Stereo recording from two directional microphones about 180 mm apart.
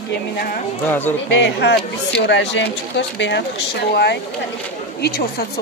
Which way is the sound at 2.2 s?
85° left.